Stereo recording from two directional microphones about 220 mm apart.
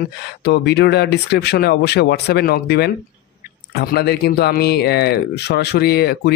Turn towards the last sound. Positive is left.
turn(degrees=45)  # may be behind; listen again after turning